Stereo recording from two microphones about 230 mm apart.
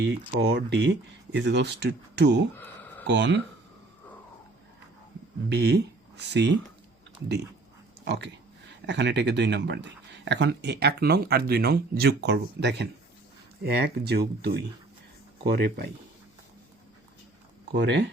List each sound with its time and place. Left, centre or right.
0.0 s speech: right
2.6 s a sound: centre
3.1 s speech: right
5.5 s speech: right
8.0 s speech: right
17.7 s speech: right